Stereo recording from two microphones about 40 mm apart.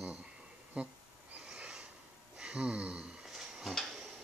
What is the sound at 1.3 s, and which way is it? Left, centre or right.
Snort, right.